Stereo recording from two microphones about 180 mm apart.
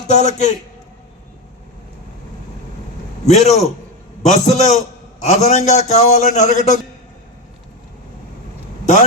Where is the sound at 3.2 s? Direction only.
35° left (ahead or behind).